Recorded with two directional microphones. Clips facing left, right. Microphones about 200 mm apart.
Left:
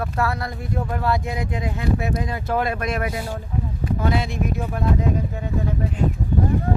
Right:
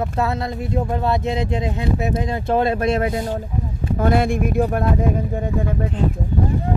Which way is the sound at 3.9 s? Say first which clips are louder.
Right 6 dB; 55° right (ahead or behind).